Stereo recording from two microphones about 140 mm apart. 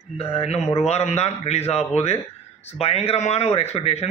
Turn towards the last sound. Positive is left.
turn(degrees=50)  # may be behind; listen again after turning